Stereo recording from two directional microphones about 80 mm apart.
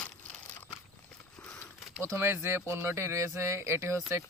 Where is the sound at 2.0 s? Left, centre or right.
Right.